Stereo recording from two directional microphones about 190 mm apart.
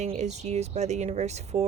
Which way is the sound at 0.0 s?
35° right (ahead or behind).